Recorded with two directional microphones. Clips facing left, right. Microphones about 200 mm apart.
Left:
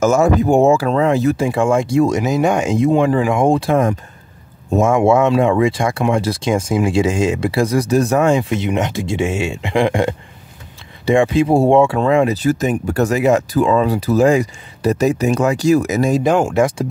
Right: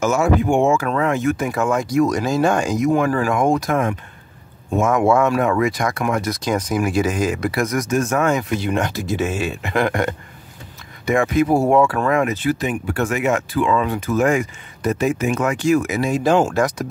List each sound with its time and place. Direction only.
0.0 s speech: 40° left (ahead or behind)
16.2 s speech: 15° left (ahead or behind)
16.5 s speech: 25° left (ahead or behind)